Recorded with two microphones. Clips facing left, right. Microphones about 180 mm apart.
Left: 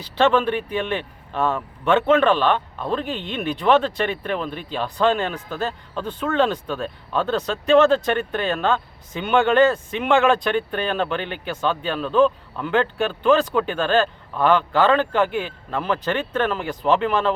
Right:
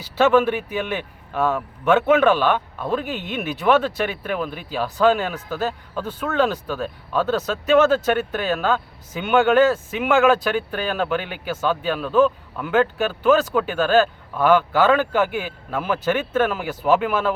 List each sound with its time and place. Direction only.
0.0 s speech: 5° right (ahead or behind)